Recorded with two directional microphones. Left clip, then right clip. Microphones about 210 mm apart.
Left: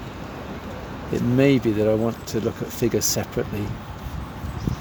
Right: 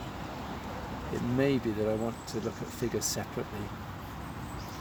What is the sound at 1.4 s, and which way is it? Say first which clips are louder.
Speech: left 10 dB; 45° left (ahead or behind).